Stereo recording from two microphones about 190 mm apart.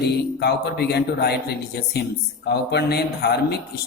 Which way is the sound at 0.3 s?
60° left (ahead or behind).